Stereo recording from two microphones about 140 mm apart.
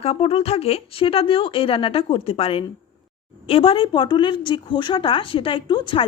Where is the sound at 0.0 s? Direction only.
45° left (ahead or behind).